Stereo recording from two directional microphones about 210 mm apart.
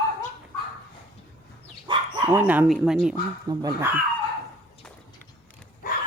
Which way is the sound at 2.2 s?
10° right (ahead or behind).